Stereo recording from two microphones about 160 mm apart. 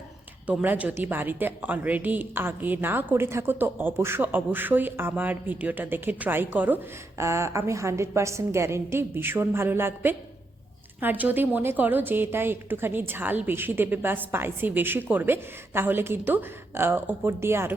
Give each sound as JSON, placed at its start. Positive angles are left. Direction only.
{"t": 0.4, "sound": "a woman's voice", "side_deg": -10}